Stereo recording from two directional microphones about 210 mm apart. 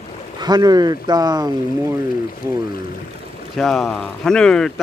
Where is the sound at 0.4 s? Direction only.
20° right (ahead or behind).